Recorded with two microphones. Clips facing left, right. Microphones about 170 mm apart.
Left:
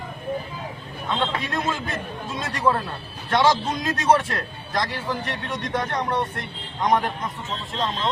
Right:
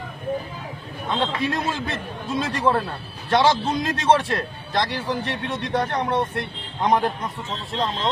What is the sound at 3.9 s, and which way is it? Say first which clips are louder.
A man's voice: even; 25° right (ahead or behind).